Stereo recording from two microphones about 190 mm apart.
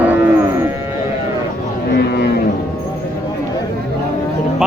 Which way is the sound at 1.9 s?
60° left (ahead or behind).